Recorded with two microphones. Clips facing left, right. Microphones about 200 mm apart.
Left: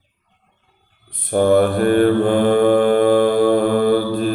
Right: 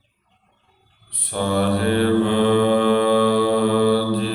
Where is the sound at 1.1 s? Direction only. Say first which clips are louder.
Left 8 dB; 50° left (ahead or behind).